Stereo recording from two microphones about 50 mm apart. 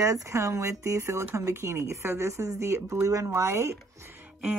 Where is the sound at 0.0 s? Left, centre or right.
Right.